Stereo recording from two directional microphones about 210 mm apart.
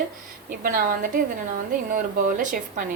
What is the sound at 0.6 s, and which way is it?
Speech, 45° right (ahead or behind).